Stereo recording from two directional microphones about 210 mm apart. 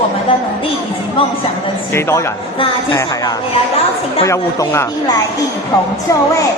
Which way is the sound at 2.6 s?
20° left (ahead or behind).